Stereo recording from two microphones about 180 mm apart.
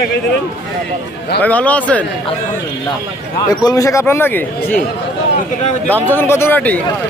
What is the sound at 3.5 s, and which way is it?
Speech, 20° left (ahead or behind).